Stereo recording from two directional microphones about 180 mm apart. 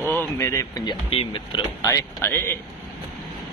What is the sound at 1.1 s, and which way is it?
Speech, 30° left (ahead or behind).